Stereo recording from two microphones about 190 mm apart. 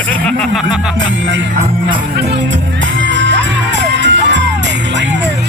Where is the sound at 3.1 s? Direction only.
75° right (ahead or behind).